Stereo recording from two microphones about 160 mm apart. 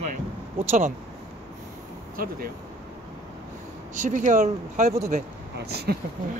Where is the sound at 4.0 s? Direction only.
50° right (ahead or behind).